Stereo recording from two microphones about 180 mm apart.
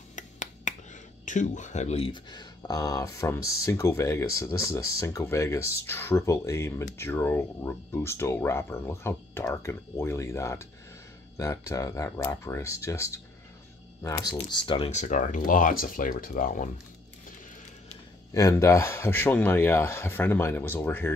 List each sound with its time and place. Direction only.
0.1 s finger snapping: 45° left (ahead or behind)
1.2 s speech: 45° left (ahead or behind); by 14.9 s 25° left (ahead or behind)
14.9 s speech: 45° left (ahead or behind)
18.3 s speech: 20° left (ahead or behind)